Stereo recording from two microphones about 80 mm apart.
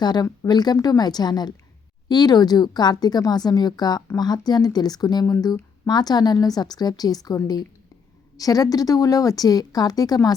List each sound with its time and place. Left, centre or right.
0.0 s a woman's voice: left
8.4 s speech: left